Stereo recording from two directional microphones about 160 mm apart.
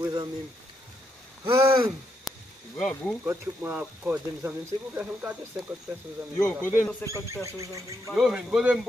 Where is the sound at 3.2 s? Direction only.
15° right (ahead or behind).